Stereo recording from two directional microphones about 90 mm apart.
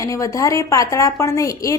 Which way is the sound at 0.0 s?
35° left (ahead or behind).